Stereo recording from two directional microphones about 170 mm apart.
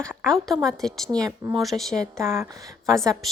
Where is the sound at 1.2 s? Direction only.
20° right (ahead or behind).